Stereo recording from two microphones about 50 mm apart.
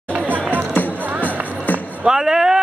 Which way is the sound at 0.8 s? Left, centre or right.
Right.